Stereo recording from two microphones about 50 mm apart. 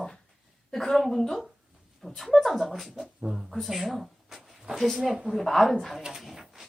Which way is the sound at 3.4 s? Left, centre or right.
Centre.